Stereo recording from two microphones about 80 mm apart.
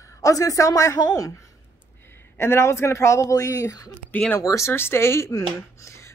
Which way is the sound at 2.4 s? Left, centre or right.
Left.